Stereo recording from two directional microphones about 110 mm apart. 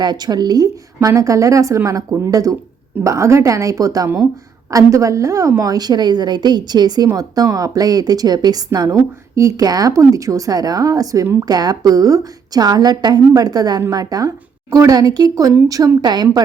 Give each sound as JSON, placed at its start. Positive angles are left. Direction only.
{"t": 0.0, "sound": "a woman's voice", "side_deg": -40}